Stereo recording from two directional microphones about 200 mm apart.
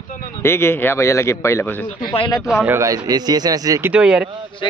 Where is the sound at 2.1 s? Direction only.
25° left (ahead or behind).